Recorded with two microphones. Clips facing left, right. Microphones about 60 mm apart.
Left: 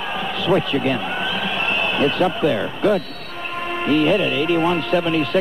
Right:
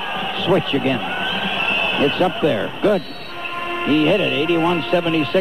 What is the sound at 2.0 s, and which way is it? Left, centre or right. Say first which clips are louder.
Speech: right 1 dB; centre.